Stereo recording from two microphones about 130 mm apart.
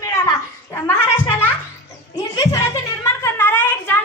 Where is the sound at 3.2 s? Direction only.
15° left (ahead or behind).